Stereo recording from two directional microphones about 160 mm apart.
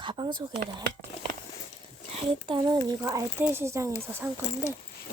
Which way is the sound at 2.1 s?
30° right (ahead or behind).